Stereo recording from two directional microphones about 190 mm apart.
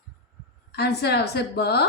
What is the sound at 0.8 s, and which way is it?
A woman's voice, 60° left (ahead or behind).